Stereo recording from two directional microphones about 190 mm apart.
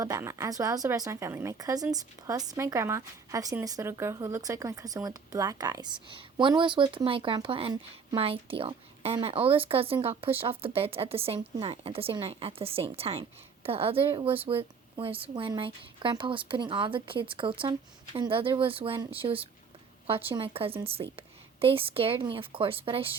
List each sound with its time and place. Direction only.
0.0 s a woman's voice: 15° right (ahead or behind)